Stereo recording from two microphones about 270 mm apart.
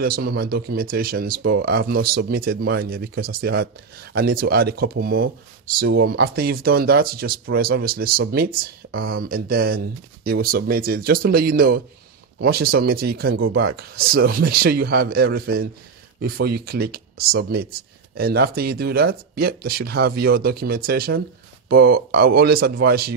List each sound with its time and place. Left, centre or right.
0.0 s speech: right